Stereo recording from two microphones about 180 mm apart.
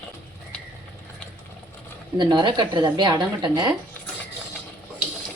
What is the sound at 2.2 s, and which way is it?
A woman's voice, 25° right (ahead or behind).